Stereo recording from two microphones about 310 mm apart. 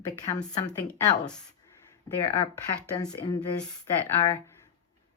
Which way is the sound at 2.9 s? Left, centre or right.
Centre.